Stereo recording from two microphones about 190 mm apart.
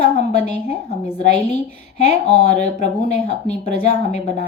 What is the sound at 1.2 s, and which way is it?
Speech, 35° left (ahead or behind).